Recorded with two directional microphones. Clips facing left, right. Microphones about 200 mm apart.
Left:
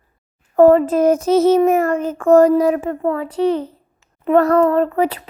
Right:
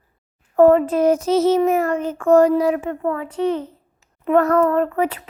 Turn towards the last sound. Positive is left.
turn(degrees=35)  # may be behind; listen again after turning